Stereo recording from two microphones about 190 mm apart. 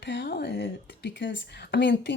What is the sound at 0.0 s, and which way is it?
A woman's voice, 65° left (ahead or behind).